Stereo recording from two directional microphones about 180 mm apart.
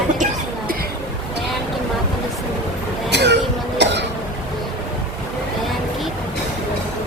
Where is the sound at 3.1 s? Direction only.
70° right (ahead or behind).